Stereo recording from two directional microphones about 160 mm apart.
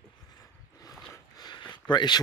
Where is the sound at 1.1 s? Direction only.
25° left (ahead or behind).